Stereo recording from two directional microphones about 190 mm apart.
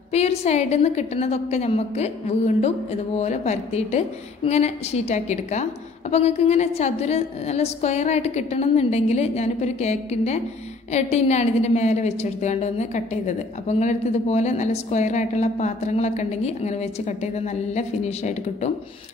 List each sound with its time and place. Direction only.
0.1 s a woman's voice: 35° left (ahead or behind)